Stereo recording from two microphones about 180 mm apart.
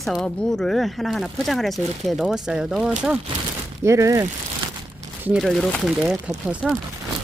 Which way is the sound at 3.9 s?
15° right (ahead or behind).